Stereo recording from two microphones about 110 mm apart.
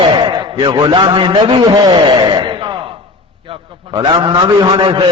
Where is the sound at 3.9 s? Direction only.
45° right (ahead or behind).